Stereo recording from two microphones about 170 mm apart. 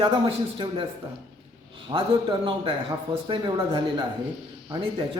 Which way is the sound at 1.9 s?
30° right (ahead or behind).